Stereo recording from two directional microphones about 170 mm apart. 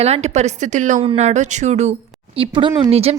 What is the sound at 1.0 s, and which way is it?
Speech, 35° right (ahead or behind).